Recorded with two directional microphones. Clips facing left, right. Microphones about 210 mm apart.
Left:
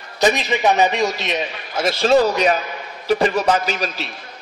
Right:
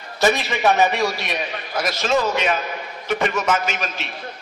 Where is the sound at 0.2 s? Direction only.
20° left (ahead or behind); by 4.1 s 35° left (ahead or behind).